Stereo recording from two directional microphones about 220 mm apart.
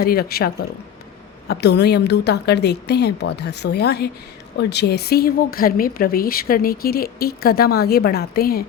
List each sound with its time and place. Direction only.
0.0 s speech: 45° left (ahead or behind)